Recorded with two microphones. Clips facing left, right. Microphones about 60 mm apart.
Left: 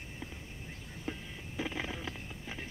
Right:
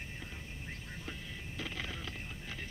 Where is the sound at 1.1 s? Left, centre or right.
Left.